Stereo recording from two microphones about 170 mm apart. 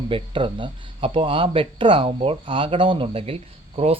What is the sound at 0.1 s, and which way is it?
A man's voice, 30° right (ahead or behind).